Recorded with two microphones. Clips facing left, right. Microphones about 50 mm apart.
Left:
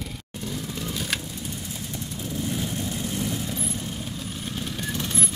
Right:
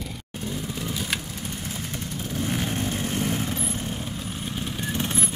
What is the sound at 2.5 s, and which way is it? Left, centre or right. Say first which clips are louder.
Vehicle: right 2 dB; right.